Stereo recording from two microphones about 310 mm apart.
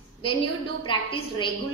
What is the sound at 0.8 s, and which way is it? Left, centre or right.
Speech, centre.